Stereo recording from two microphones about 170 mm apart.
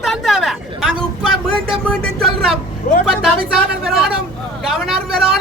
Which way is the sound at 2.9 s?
55° left (ahead or behind).